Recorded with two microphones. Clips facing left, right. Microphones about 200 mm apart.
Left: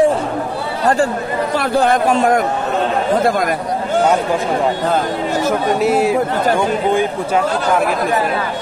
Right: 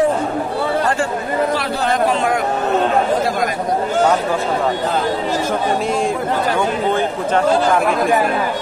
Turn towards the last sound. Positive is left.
turn(degrees=10)  # may be behind; listen again after turning